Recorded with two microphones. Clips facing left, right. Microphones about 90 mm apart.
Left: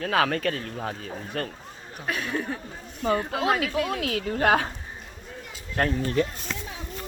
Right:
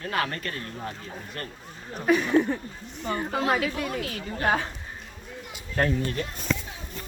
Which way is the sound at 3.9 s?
90° left.